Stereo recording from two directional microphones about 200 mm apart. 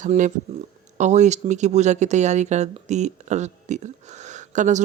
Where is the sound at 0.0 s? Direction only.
40° right (ahead or behind).